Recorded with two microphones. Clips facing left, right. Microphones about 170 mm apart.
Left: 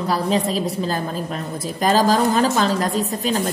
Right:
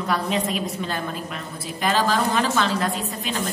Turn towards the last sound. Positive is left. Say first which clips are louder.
# left 6 dB
turn(degrees=40)  # may be behind; listen again after turning